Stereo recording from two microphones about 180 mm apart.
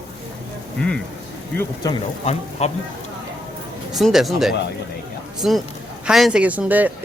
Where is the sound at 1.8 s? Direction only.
20° left (ahead or behind).